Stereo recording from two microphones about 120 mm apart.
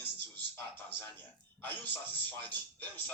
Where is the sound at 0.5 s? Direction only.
15° left (ahead or behind).